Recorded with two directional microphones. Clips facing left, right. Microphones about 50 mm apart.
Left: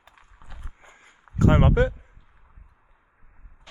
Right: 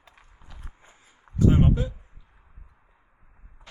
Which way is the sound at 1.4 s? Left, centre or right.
Left.